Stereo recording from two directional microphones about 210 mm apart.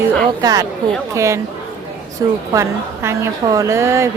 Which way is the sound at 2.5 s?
15° right (ahead or behind).